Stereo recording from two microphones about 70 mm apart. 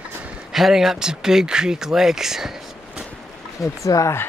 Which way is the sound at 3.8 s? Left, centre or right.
Left.